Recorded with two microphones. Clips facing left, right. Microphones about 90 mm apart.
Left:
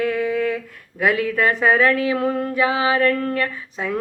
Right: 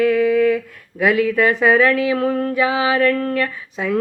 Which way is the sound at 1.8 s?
35° left (ahead or behind).